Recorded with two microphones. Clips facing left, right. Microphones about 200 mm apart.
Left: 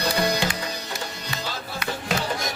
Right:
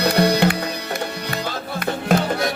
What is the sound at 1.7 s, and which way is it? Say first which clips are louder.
Music: right 9 dB; 55° right (ahead or behind).